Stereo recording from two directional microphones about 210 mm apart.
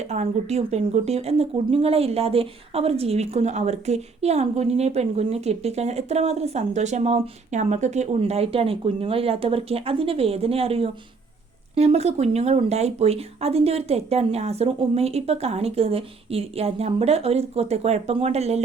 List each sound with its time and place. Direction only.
0.0 s speech: 30° right (ahead or behind)